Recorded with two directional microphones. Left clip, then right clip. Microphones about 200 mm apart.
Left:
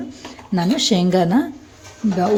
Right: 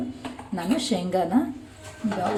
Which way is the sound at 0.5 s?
40° left (ahead or behind).